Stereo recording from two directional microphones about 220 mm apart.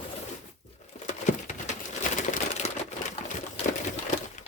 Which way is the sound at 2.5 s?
30° left (ahead or behind).